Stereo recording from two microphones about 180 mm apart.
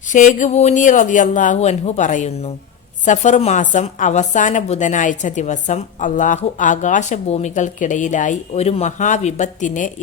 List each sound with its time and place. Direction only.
0.1 s a woman's voice: 45° left (ahead or behind)